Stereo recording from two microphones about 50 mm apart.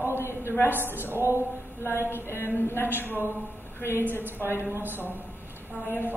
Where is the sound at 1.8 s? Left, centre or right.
Left.